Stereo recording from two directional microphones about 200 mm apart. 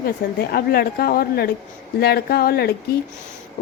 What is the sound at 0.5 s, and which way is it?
A woman's voice, 50° left (ahead or behind).